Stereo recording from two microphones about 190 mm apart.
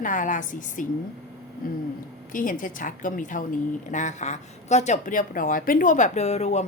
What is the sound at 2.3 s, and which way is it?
Speech, 45° left (ahead or behind).